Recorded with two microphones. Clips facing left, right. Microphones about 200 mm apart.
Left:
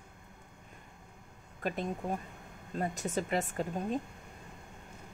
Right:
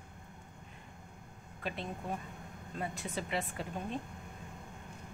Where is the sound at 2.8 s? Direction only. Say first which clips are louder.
Left 5 dB; 45° left (ahead or behind).